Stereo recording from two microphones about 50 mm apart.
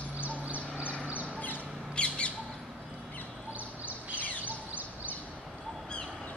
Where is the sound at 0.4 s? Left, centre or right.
Right.